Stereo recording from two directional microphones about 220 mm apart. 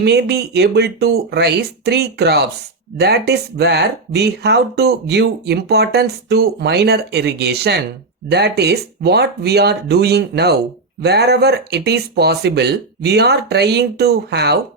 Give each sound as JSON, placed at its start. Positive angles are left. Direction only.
{"t": 0.0, "sound": "speech", "side_deg": -50}